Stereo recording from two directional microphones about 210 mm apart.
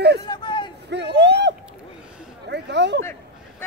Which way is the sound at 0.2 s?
20° left (ahead or behind).